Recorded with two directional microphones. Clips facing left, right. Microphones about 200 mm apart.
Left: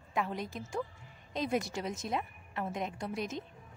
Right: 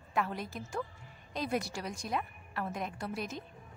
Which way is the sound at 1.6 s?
20° left (ahead or behind).